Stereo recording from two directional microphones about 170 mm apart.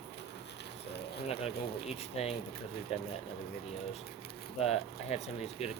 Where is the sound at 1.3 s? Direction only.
35° left (ahead or behind).